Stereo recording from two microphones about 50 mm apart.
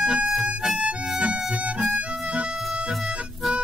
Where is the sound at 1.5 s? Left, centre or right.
Centre.